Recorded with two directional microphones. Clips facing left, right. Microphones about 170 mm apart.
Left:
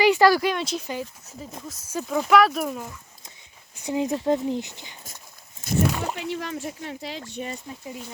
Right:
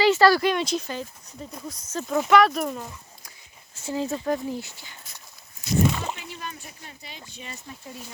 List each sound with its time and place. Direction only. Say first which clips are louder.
0.0 s a sound: even; 15° left (ahead or behind)
0.5 s speech: right 2 dB; centre (ahead or behind)
3.8 s speech: left 3 dB; 15° left (ahead or behind)
5.9 s splash: left 2 dB; 10° left (ahead or behind)
6.1 s speech: left 9 dB; 80° left
7.7 s speech: left 4 dB; 15° left (ahead or behind)